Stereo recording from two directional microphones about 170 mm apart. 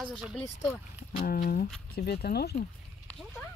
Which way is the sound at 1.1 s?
60° left (ahead or behind).